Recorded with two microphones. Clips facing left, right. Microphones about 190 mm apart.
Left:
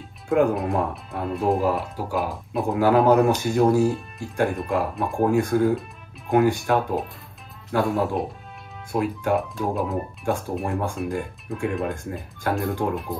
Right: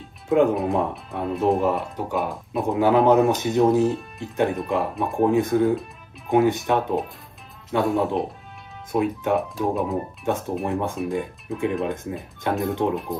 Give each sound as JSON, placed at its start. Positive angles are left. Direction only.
{"t": 0.3, "sound": "speech", "side_deg": 0}